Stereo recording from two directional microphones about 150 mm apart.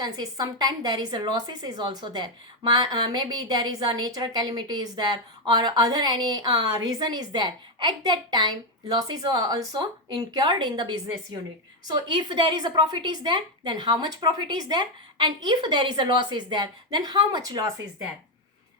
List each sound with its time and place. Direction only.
0.0 s a woman's voice: 25° right (ahead or behind)